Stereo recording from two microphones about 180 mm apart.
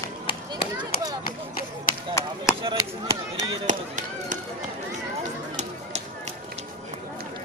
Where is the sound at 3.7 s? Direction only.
45° right (ahead or behind).